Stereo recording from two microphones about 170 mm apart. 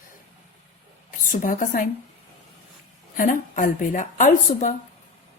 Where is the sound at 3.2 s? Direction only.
50° left (ahead or behind).